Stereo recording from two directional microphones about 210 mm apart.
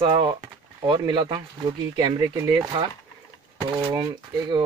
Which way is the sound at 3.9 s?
20° right (ahead or behind).